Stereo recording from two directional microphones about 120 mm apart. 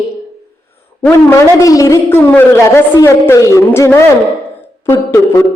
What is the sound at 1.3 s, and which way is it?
A man's voice, 25° left (ahead or behind).